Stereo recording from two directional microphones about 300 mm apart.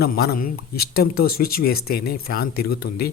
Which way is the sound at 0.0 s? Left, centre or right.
Left.